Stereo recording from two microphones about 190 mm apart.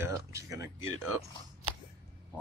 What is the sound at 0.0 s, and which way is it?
Speech, 15° right (ahead or behind).